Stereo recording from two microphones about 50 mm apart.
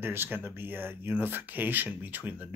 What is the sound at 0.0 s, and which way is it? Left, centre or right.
Speech, right.